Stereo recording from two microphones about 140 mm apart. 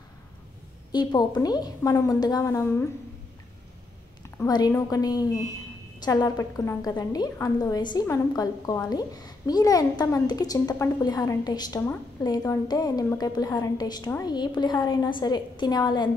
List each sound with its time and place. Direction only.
0.9 s a woman's voice: 30° left (ahead or behind)
4.5 s a woman's voice: 25° left (ahead or behind)